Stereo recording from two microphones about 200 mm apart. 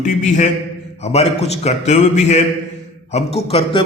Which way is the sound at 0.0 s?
40° left (ahead or behind).